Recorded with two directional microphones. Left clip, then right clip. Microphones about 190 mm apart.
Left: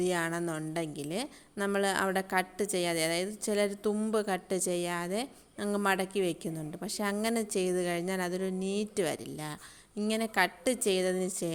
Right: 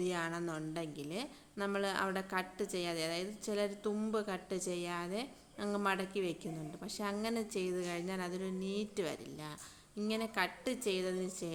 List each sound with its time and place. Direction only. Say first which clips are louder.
0.0 s a woman's voice: left 7 dB; 40° left (ahead or behind)